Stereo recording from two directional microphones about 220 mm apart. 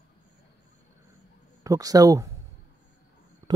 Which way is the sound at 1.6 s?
15° right (ahead or behind).